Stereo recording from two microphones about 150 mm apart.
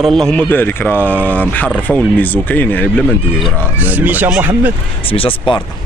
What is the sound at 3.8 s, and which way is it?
Speech, 10° right (ahead or behind).